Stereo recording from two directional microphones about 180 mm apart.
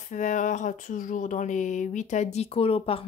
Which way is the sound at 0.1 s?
45° left (ahead or behind).